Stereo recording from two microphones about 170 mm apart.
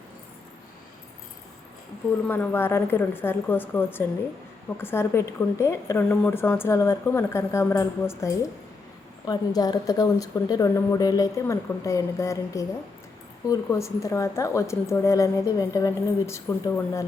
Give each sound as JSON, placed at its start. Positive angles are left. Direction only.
{"t": 2.2, "sound": "speech", "side_deg": 10}